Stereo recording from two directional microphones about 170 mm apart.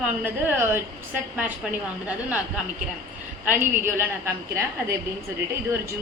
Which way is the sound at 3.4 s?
10° right (ahead or behind).